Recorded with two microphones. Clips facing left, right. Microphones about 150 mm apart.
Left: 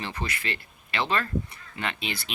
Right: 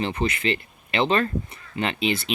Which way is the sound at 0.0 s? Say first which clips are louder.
Right 9 dB; 20° right (ahead or behind).